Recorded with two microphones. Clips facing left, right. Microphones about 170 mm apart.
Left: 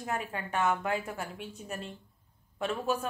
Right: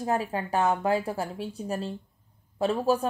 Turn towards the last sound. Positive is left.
turn(degrees=-30)  # may be behind; listen again after turning